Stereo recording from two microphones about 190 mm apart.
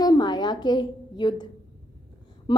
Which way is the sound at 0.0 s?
20° left (ahead or behind).